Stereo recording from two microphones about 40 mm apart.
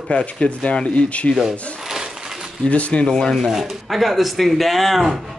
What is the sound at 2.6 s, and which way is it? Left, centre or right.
Speech, left.